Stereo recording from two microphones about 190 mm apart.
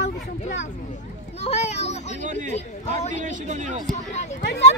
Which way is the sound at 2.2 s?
40° right (ahead or behind).